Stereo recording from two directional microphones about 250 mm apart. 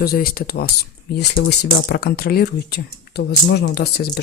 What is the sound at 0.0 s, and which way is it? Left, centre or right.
Speech, left.